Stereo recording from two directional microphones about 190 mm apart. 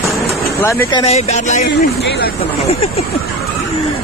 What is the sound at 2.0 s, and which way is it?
Speech, 60° left (ahead or behind).